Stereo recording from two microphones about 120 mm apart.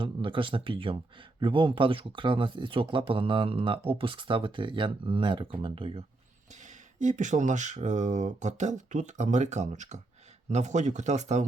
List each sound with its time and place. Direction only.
0.0 s speech: 45° right (ahead or behind)
6.5 s speech: 85° right